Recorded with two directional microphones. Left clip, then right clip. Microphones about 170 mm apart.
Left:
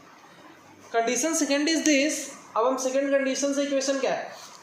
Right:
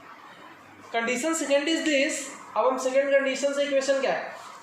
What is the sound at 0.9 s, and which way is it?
A woman's voice, 30° left (ahead or behind).